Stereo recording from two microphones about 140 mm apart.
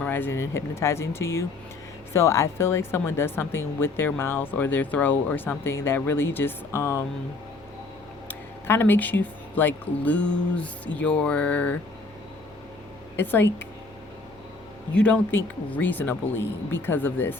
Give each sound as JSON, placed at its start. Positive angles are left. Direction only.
{"t": 0.0, "sound": "speech", "side_deg": 15}
{"t": 8.3, "sound": "speech", "side_deg": 15}
{"t": 13.1, "sound": "speech", "side_deg": 15}
{"t": 14.9, "sound": "speech", "side_deg": 10}